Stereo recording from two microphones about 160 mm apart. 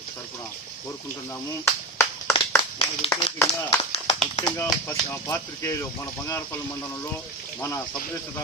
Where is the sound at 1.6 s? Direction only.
15° left (ahead or behind).